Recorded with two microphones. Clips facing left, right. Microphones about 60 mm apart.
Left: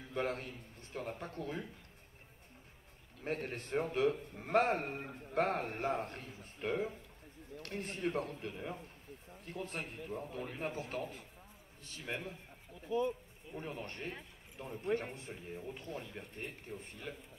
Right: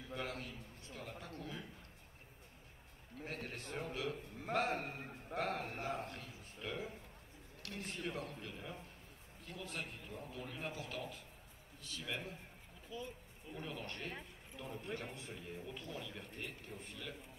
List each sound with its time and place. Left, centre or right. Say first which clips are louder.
0.1 s a man's voice: left 7 dB; left
3.3 s a man's voice: left 8 dB; left
12.8 s speech: left 13 dB; left
13.5 s a man's voice: left 3 dB; left
15.3 s a man's voice: left 2 dB; left
15.6 s a man's voice: left 3 dB; left